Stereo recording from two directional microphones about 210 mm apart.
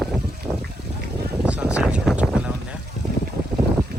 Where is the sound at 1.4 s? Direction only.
5° right (ahead or behind).